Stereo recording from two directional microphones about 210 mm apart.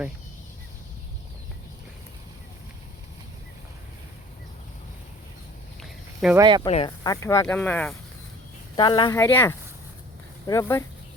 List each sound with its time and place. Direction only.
6.3 s speech: 20° right (ahead or behind)
6.7 s speech: 30° left (ahead or behind)
7.0 s speech: 15° left (ahead or behind)
8.7 s speech: 20° left (ahead or behind)